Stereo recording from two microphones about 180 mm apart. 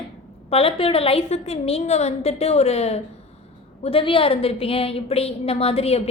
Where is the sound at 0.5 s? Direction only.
30° left (ahead or behind).